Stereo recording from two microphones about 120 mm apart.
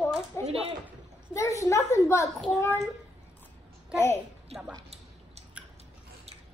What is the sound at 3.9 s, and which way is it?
Speech, 20° left (ahead or behind).